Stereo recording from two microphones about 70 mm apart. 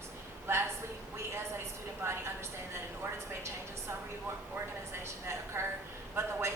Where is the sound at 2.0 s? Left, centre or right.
Right.